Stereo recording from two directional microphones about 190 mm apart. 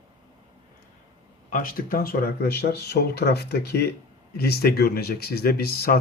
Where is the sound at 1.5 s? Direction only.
45° left (ahead or behind).